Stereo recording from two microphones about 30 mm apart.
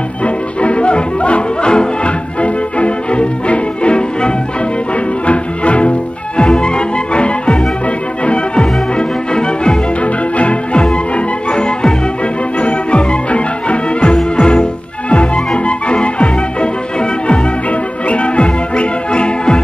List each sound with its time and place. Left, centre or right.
0.2 s music: left
10.3 s music: left
18.0 s music: left